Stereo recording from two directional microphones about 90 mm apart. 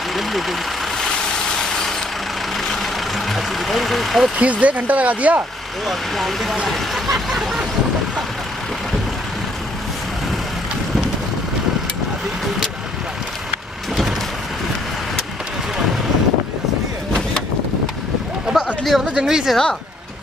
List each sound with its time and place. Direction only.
0.1 s vehicle: centre (ahead or behind)
4.4 s speech: 15° right (ahead or behind)
5.9 s speech: centre (ahead or behind)
18.6 s a sound: centre (ahead or behind)
18.9 s speech: 5° right (ahead or behind)